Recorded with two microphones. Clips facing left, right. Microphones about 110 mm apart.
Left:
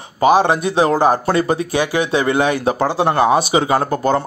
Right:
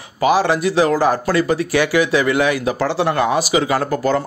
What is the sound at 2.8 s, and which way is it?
Speech, 15° left (ahead or behind).